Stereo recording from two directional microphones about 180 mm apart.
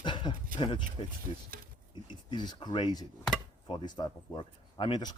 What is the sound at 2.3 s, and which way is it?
Speech, 25° left (ahead or behind).